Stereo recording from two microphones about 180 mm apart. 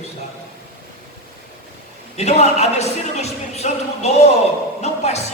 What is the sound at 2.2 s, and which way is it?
Speech, 35° left (ahead or behind).